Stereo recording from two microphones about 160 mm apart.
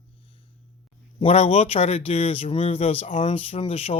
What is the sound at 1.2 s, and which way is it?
Speech, 40° left (ahead or behind).